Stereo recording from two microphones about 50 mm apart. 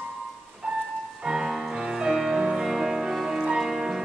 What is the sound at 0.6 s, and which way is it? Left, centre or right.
Music, right.